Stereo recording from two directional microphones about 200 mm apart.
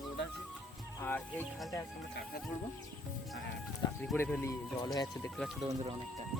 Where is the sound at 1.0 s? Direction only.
10° left (ahead or behind).